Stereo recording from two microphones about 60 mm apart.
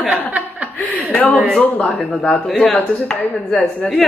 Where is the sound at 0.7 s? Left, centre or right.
Left.